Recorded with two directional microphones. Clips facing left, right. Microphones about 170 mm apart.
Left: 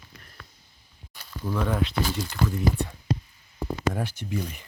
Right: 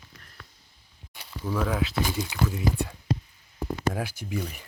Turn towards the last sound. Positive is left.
turn(degrees=-5)  # may be behind; listen again after turning